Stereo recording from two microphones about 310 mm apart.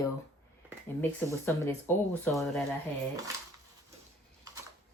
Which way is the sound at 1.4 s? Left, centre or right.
Centre.